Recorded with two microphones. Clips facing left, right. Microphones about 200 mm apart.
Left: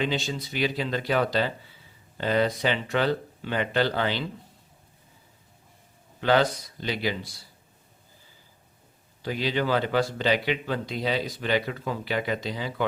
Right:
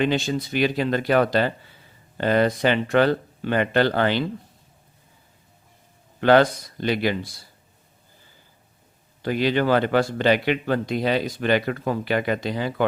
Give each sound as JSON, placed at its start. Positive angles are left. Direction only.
{"t": 0.0, "sound": "speech", "side_deg": -55}
{"t": 6.1, "sound": "speech", "side_deg": -60}
{"t": 9.2, "sound": "speech", "side_deg": -60}